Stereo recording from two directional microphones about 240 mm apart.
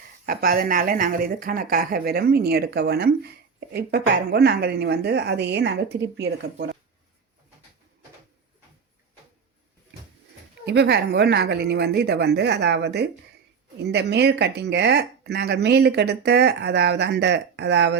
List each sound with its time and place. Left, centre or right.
0.3 s speech: right
10.7 s speech: right